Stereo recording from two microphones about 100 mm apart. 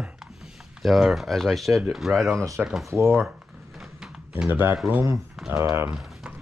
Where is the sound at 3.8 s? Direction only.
5° right (ahead or behind).